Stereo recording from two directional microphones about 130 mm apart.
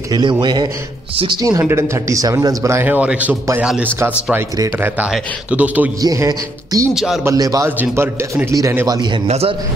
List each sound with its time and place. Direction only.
0.1 s a man's voice: 35° right (ahead or behind)
1.4 s speech: 25° right (ahead or behind)
5.9 s speech: 25° right (ahead or behind)
6.9 s speech: 5° right (ahead or behind)
7.2 s speech: 25° right (ahead or behind)
9.3 s a man's voice: 50° right (ahead or behind)